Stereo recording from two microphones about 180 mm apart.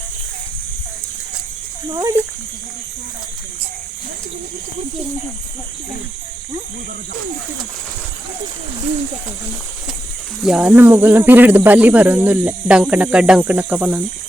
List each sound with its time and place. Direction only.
1.9 s speech: 20° right (ahead or behind)
10.4 s speech: 5° right (ahead or behind)